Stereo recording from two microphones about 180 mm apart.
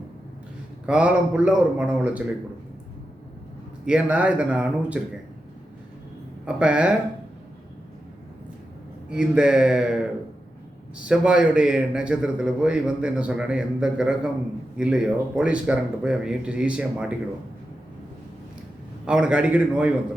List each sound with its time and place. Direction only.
0.9 s speech: 5° right (ahead or behind)
3.8 s speech: 5° right (ahead or behind)
6.4 s a man's voice: 5° right (ahead or behind)
9.0 s a man's voice: 5° right (ahead or behind)
19.0 s speech: 5° right (ahead or behind)